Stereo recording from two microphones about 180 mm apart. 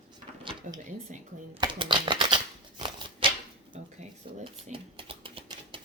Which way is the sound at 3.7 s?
40° right (ahead or behind).